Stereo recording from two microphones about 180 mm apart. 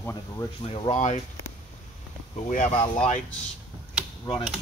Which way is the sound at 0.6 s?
35° left (ahead or behind).